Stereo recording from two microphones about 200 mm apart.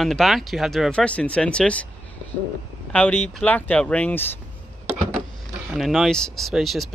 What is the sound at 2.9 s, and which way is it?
Speech, 10° left (ahead or behind).